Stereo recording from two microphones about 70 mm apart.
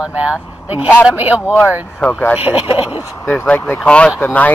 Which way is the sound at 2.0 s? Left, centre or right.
Centre.